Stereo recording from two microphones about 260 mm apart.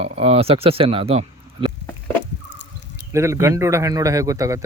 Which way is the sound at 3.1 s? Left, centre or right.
Centre.